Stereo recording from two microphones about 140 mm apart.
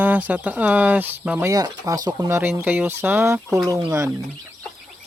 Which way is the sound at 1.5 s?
25° right (ahead or behind).